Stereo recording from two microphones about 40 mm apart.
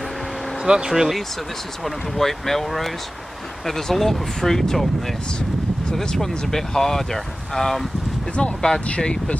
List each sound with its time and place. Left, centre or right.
0.6 s speech: centre
1.9 s speech: centre
8.5 s speech: centre
8.8 s speech: left